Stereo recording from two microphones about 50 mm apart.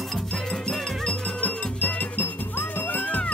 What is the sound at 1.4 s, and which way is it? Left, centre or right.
Music, left.